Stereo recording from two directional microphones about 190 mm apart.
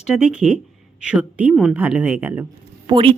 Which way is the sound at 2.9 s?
25° right (ahead or behind).